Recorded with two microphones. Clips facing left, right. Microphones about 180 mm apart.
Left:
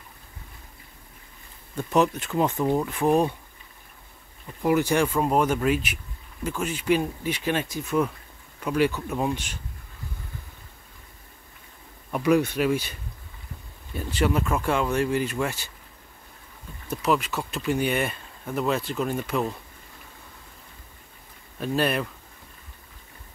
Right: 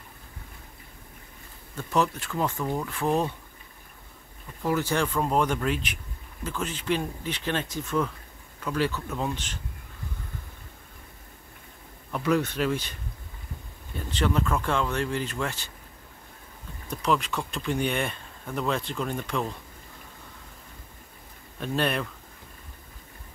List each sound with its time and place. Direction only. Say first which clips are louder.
1.8 s speech: left 4 dB; 20° left (ahead or behind)
4.6 s speech: left 4 dB; 15° left (ahead or behind)
12.1 s speech: left 4 dB; 10° left (ahead or behind)
13.9 s speech: left 2 dB; 10° left (ahead or behind)
16.9 s speech: left 2 dB; 5° left (ahead or behind)
21.5 s speech: left 3 dB; 5° left (ahead or behind)